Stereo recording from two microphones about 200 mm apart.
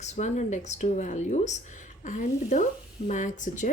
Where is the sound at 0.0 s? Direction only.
35° left (ahead or behind).